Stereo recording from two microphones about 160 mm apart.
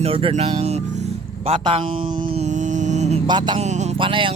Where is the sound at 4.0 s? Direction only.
30° right (ahead or behind).